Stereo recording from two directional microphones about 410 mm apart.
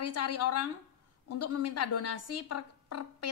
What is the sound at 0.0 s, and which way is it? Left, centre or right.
A woman's voice, left.